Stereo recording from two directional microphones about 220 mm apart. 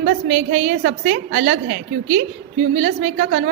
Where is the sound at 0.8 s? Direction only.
50° right (ahead or behind).